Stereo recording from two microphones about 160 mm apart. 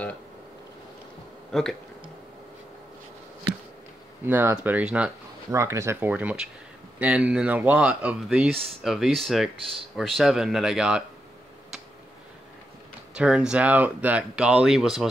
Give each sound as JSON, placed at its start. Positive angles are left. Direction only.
{"t": 1.5, "sound": "speech", "side_deg": 5}
{"t": 4.2, "sound": "speech", "side_deg": -15}
{"t": 5.5, "sound": "speech", "side_deg": -20}
{"t": 13.1, "sound": "speech", "side_deg": -5}